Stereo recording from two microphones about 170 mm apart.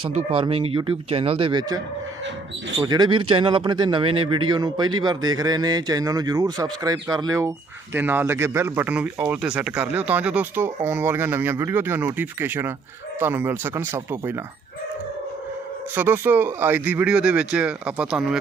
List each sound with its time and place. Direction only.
0.0 s speech: 30° right (ahead or behind)
2.8 s speech: 25° right (ahead or behind)
16.0 s speech: 10° right (ahead or behind)